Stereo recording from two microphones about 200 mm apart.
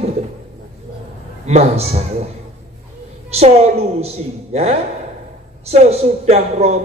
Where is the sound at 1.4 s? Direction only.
30° right (ahead or behind).